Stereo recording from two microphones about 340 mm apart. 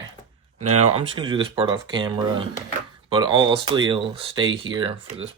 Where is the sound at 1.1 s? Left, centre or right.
Centre.